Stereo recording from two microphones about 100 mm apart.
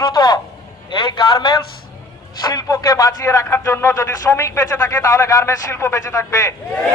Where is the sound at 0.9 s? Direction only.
55° left (ahead or behind).